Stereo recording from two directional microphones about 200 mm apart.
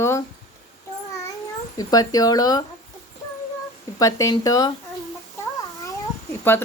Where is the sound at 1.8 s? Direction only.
20° left (ahead or behind).